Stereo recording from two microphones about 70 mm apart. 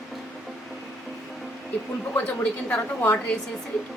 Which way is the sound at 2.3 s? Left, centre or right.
Left.